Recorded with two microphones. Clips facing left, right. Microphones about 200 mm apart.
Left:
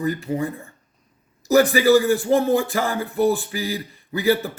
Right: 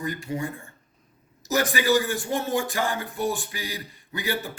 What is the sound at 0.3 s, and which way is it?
Speech, 35° left (ahead or behind).